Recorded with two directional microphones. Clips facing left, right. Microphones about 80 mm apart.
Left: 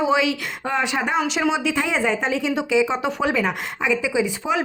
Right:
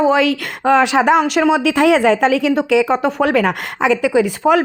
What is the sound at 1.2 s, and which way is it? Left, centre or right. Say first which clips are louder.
A woman's voice: right 7 dB; right.